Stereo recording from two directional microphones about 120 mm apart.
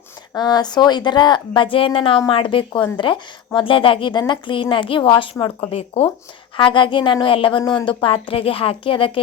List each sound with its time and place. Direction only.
0.3 s speech: 35° left (ahead or behind)